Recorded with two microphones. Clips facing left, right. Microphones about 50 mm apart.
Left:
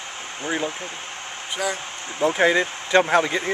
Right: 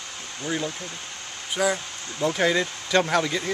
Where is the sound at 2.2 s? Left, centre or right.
Left.